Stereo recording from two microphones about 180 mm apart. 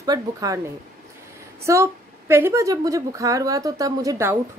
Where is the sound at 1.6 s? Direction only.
15° right (ahead or behind).